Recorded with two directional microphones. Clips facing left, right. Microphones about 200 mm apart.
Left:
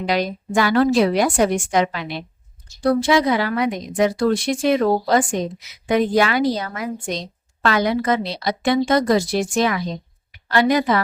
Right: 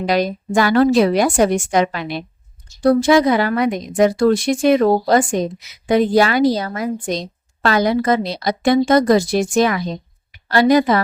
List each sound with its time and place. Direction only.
0.0 s a woman's voice: 45° right (ahead or behind)